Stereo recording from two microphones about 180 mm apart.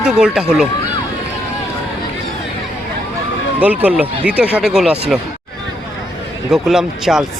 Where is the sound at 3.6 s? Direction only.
10° right (ahead or behind).